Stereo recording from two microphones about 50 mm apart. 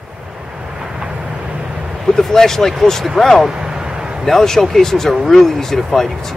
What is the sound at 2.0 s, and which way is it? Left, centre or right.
Speech, centre.